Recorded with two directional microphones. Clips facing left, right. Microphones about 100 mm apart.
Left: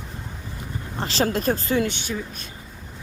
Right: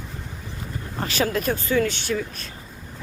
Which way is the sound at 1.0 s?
30° left (ahead or behind).